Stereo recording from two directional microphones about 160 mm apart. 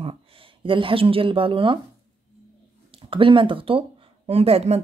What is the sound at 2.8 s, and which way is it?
Speech, 35° right (ahead or behind).